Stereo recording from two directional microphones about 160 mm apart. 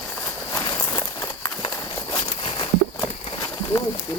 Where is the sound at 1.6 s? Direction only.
30° left (ahead or behind).